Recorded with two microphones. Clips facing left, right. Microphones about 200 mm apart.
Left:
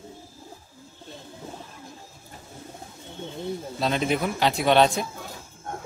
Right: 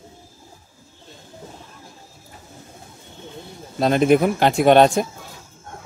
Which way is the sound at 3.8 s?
50° right (ahead or behind).